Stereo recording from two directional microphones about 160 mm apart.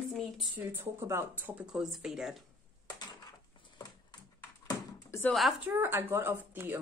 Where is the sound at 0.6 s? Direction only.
15° right (ahead or behind).